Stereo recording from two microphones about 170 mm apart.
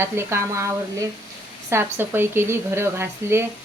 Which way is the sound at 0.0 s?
15° right (ahead or behind).